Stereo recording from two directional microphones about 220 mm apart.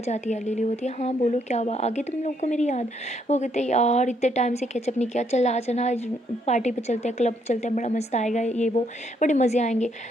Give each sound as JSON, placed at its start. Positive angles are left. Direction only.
{"t": 0.0, "sound": "speech", "side_deg": 30}